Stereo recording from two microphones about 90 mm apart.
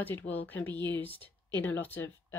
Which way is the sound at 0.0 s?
20° left (ahead or behind).